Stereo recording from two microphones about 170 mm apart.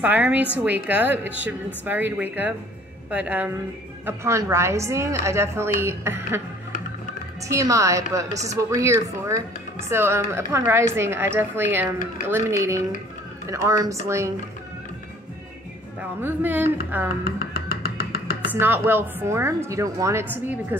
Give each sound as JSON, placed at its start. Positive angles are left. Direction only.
{"t": 0.0, "sound": "a woman's voice", "side_deg": -10}
{"t": 7.4, "sound": "a woman's voice", "side_deg": -20}
{"t": 16.0, "sound": "a woman's voice", "side_deg": -10}
{"t": 17.2, "sound": "music", "side_deg": 60}
{"t": 18.6, "sound": "a woman's voice", "side_deg": -15}